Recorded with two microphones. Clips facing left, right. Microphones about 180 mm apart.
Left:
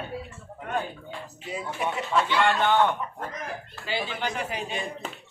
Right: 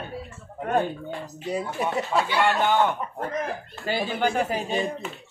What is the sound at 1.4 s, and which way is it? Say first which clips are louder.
Speech: right 3 dB; 35° right (ahead or behind).